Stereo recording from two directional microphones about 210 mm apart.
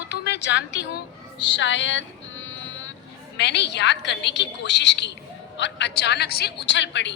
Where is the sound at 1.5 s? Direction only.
60° left (ahead or behind).